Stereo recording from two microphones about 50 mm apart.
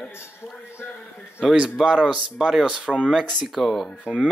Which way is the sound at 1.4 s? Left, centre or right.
Centre.